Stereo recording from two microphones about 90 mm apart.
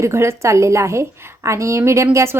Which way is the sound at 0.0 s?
30° right (ahead or behind).